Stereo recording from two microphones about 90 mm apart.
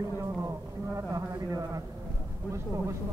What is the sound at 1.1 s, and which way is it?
Speech, 40° right (ahead or behind).